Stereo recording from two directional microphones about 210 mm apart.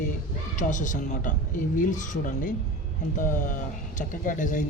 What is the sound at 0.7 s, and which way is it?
Speech, 35° left (ahead or behind).